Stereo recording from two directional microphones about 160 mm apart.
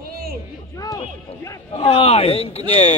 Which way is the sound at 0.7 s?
20° left (ahead or behind).